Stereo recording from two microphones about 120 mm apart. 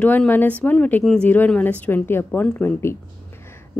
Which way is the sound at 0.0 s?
15° left (ahead or behind).